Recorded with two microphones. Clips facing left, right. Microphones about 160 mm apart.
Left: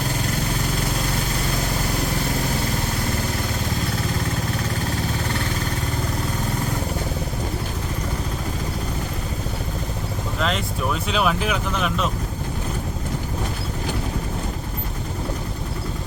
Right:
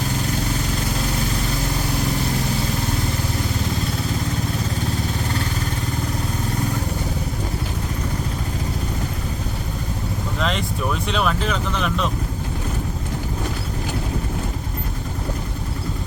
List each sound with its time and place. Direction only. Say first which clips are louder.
10.4 s speech: even; centre (ahead or behind)